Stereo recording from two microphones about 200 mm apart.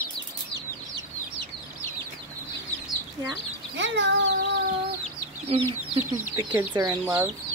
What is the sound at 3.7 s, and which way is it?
Speech, 60° right (ahead or behind).